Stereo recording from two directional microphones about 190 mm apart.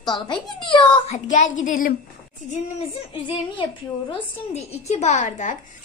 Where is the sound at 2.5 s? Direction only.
30° left (ahead or behind).